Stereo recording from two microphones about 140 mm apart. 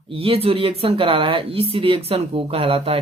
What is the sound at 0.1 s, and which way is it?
Speech, 45° right (ahead or behind).